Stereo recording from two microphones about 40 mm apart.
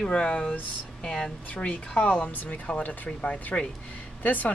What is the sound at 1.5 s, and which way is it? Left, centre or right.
Speech, left.